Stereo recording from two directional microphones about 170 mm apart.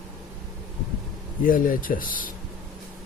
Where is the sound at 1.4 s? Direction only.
55° left (ahead or behind).